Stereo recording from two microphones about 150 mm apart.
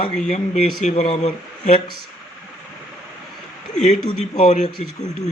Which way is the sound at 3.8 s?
50° left (ahead or behind).